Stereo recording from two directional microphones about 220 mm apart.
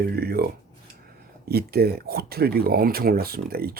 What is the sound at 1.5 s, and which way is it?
Speech, 45° right (ahead or behind).